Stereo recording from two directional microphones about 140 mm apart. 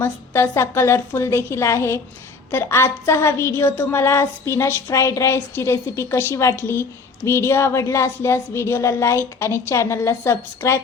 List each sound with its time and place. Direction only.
0.0 s a woman's voice: 15° left (ahead or behind)